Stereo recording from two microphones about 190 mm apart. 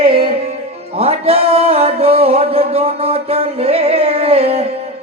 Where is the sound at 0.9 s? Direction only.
30° right (ahead or behind).